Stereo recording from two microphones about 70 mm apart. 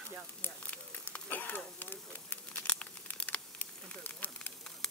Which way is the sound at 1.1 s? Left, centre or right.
Left.